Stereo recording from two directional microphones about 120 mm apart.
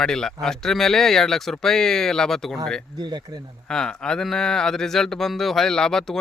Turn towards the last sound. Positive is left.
turn(degrees=5)  # may be behind; listen again after turning